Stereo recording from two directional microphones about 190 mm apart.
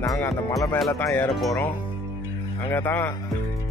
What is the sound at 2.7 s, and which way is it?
Speech, 10° left (ahead or behind).